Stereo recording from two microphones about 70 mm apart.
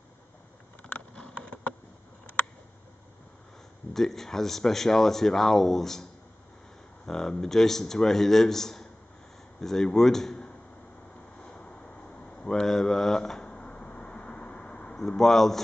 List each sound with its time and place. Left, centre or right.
0.8 s a sound: centre
3.9 s speech: centre
7.1 s speech: centre
11.4 s a sound: centre
13.5 s vehicle: centre
15.0 s speech: centre